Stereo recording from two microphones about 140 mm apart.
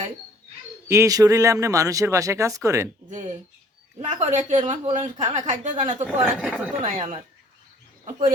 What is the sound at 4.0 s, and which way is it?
Speech, 50° right (ahead or behind).